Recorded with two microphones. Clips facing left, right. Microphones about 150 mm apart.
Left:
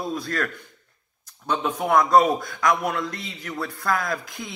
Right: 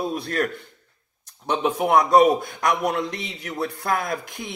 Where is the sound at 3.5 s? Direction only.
25° right (ahead or behind).